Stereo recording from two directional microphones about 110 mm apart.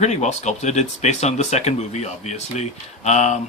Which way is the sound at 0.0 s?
90° left.